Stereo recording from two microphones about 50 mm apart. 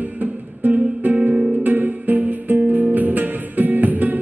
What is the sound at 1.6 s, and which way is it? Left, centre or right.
Music, right.